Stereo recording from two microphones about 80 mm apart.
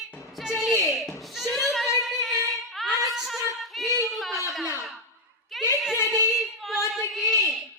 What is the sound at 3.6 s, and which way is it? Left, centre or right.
Female singing, centre.